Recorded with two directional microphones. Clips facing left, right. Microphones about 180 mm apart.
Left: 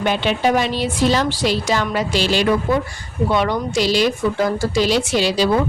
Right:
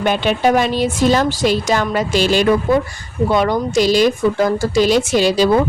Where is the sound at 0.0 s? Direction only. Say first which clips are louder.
Right 3 dB; 50° right (ahead or behind).